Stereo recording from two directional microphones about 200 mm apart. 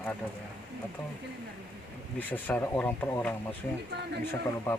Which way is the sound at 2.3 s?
10° left (ahead or behind).